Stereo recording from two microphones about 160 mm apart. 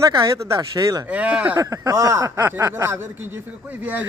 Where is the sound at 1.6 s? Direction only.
20° right (ahead or behind).